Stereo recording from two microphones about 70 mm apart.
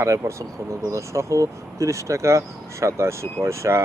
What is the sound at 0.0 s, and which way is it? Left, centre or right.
Speech, right.